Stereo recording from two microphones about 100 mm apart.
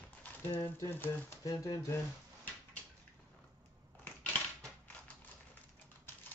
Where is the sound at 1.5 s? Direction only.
35° left (ahead or behind).